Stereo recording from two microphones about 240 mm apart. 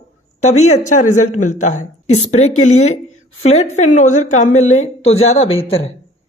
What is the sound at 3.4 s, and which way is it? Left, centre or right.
A woman's voice, left.